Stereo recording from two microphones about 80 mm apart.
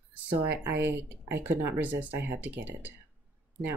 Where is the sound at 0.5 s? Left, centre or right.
Right.